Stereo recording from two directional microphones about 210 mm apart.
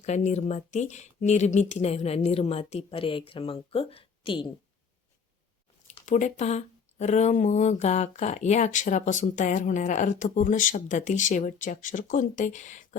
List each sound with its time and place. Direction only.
0.0 s speech: 35° left (ahead or behind)
6.1 s speech: 35° left (ahead or behind)